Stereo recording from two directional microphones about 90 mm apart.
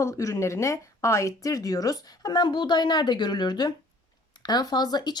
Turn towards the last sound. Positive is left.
turn(degrees=50)  # may be behind; listen again after turning